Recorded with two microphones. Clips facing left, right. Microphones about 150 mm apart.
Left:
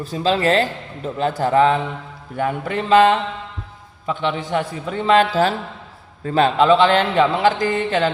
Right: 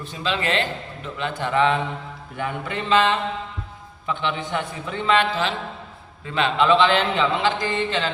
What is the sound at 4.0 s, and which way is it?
A man's voice, 35° left (ahead or behind).